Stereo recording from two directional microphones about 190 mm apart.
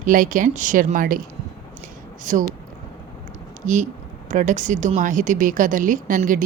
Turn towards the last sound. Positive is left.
turn(degrees=-45)  # may be behind; listen again after turning